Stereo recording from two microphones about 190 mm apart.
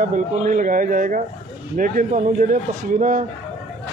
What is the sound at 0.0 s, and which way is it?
Speech, 45° right (ahead or behind).